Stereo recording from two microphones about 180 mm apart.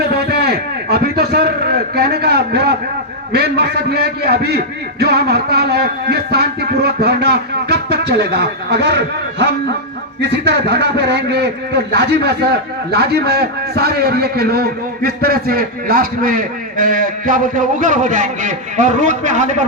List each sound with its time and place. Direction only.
0.0 s a sound: 65° right (ahead or behind)
3.3 s a man's voice: 65° right (ahead or behind)
10.2 s a man's voice: 70° right (ahead or behind); by 19.6 s 40° right (ahead or behind)